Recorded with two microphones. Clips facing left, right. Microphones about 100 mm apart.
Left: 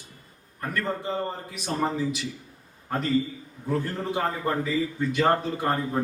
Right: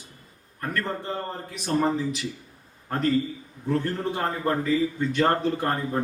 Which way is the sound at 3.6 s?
5° left (ahead or behind).